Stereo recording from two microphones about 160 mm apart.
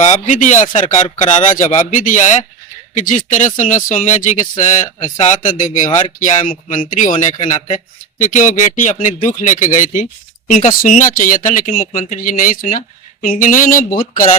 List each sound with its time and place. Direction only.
0.0 s speech: 50° left (ahead or behind)